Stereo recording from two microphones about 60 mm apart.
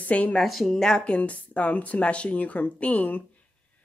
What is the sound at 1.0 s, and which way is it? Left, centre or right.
Speech, left.